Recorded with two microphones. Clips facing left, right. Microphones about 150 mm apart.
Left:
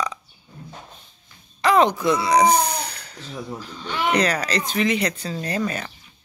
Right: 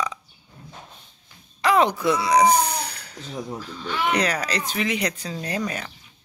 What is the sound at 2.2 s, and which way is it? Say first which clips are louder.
Speech: even; 10° right (ahead or behind).